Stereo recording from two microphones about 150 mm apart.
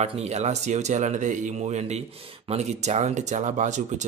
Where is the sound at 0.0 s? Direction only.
45° right (ahead or behind).